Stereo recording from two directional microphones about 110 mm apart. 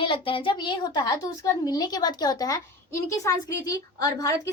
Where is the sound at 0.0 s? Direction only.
50° left (ahead or behind).